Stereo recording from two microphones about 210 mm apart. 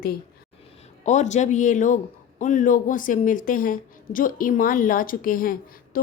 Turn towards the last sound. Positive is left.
turn(degrees=40)  # may be behind; listen again after turning